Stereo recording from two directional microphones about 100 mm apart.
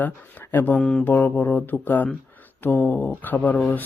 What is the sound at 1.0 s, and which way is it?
Speech, 20° left (ahead or behind).